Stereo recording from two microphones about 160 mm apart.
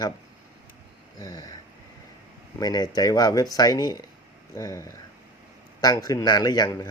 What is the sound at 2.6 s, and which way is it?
Speech, 25° left (ahead or behind).